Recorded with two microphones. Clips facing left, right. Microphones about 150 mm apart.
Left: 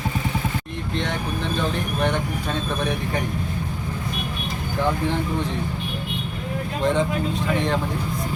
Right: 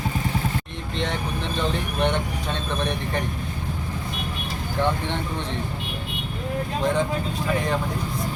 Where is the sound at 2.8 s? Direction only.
5° left (ahead or behind).